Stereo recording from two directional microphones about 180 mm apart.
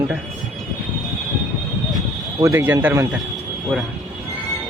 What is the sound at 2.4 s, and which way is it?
Speech, 15° right (ahead or behind).